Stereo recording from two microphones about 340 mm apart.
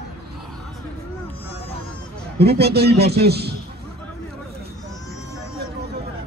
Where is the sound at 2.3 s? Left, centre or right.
Right.